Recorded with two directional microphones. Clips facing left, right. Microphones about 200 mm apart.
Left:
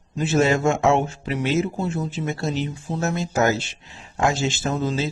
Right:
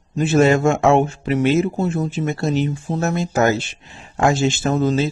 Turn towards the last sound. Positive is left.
turn(degrees=-50)  # may be behind; listen again after turning